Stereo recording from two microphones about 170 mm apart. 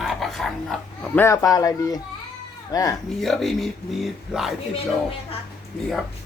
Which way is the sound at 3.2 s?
Centre (ahead or behind).